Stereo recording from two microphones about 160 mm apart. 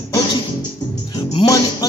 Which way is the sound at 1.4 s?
35° left (ahead or behind).